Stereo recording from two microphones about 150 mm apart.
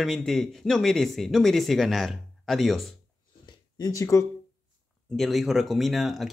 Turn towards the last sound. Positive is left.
turn(degrees=0)  # may be behind; listen again after turning